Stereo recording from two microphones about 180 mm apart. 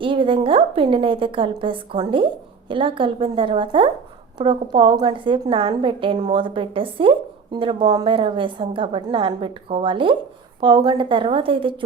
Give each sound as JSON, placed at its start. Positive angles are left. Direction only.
{"t": 0.0, "sound": "a woman's voice", "side_deg": -30}